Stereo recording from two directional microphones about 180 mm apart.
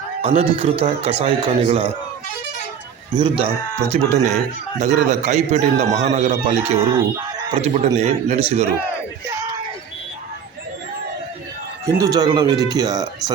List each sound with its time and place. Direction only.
0.2 s a man's voice: 35° right (ahead or behind)
3.2 s a man's voice: 30° right (ahead or behind)
6.7 s speech: 15° right (ahead or behind)
7.5 s a man's voice: 35° right (ahead or behind)
11.9 s speech: 20° right (ahead or behind)